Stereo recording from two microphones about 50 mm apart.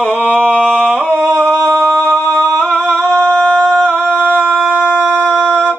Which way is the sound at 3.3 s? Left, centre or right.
Left.